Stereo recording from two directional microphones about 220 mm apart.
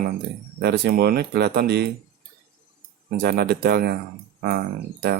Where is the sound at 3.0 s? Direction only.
45° right (ahead or behind).